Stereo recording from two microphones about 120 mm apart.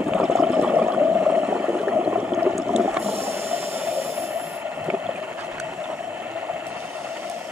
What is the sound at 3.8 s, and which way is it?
Vehicle, 60° right (ahead or behind).